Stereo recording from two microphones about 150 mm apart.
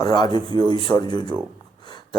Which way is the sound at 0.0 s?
30° left (ahead or behind).